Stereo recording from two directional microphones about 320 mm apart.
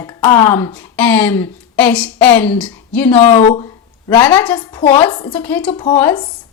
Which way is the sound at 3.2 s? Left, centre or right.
Left.